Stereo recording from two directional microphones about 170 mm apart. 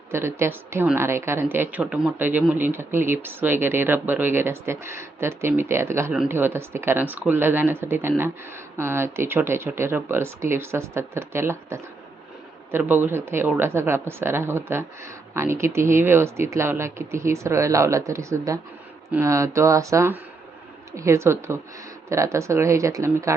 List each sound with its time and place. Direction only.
0.1 s speech: 15° right (ahead or behind)